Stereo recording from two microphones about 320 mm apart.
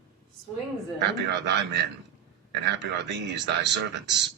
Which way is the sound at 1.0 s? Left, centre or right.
Right.